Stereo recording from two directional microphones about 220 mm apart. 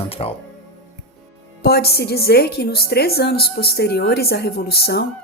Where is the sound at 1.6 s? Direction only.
45° left (ahead or behind).